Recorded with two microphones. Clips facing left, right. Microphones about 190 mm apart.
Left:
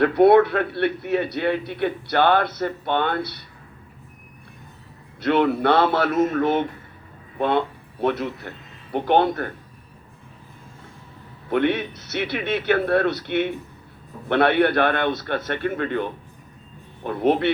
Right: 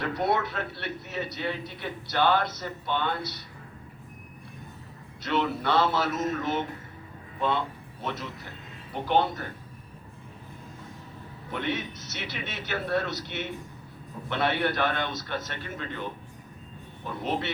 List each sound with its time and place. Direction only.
0.0 s a man's voice: 60° left (ahead or behind)
5.2 s a man's voice: 60° left (ahead or behind)
11.5 s a man's voice: 60° left (ahead or behind)
17.1 s a man's voice: 60° left (ahead or behind)